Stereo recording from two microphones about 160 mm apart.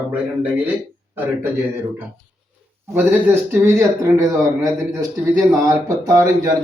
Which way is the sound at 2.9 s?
15° right (ahead or behind).